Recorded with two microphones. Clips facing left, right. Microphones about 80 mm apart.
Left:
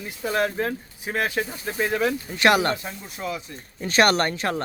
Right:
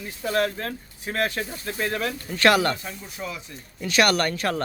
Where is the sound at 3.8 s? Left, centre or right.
Left.